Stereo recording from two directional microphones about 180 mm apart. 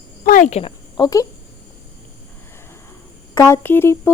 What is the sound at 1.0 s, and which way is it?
Speech, 20° left (ahead or behind).